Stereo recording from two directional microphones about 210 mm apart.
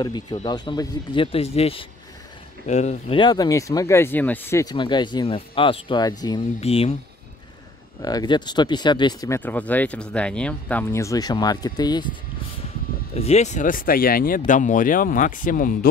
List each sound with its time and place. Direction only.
0.0 s speech: 20° left (ahead or behind)
3.2 s speech: 20° left (ahead or behind)
8.0 s speech: 20° left (ahead or behind)
13.1 s speech: 30° left (ahead or behind)